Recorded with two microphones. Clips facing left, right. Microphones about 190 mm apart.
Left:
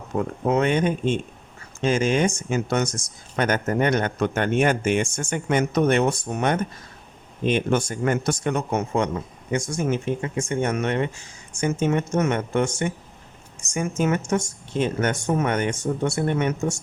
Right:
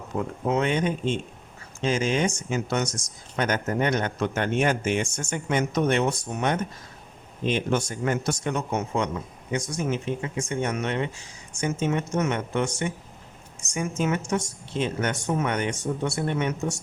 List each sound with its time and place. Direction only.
0.2 s speech: 55° left (ahead or behind)